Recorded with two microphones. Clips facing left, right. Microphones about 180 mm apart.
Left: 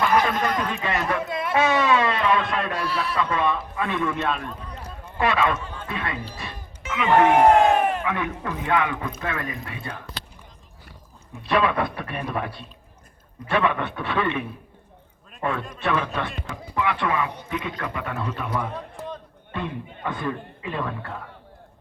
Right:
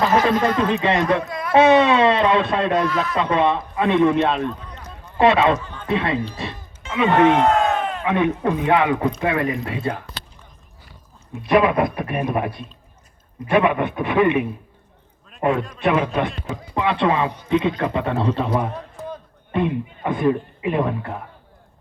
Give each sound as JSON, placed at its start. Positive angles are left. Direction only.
{"t": 0.1, "sound": "speech", "side_deg": -25}
{"t": 1.3, "sound": "a sound", "side_deg": 25}
{"t": 1.5, "sound": "speech", "side_deg": -20}
{"t": 7.3, "sound": "crowd", "side_deg": 15}
{"t": 8.0, "sound": "speech", "side_deg": -25}
{"t": 11.4, "sound": "a man's voice", "side_deg": -15}
{"t": 20.1, "sound": "speech", "side_deg": -20}